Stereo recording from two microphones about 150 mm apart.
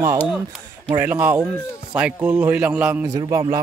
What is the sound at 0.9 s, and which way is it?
A man's voice, 10° right (ahead or behind).